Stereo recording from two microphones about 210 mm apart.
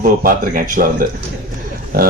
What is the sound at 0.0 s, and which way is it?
Speech, 40° right (ahead or behind).